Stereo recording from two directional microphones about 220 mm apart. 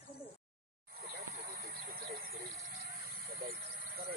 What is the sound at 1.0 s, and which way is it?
Snake, 45° right (ahead or behind).